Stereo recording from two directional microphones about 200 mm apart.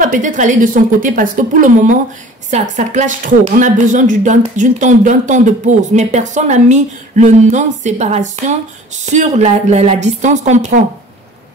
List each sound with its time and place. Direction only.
0.0 s speech: 40° right (ahead or behind)